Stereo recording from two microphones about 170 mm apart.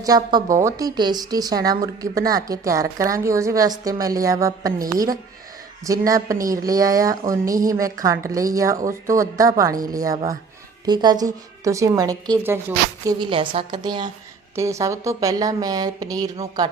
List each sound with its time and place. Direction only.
0.0 s speech: 25° right (ahead or behind)
5.8 s speech: 20° right (ahead or behind)
13.1 s speech: 30° right (ahead or behind)